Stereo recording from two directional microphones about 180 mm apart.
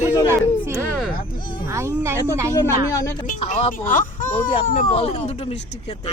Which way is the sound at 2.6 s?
20° left (ahead or behind).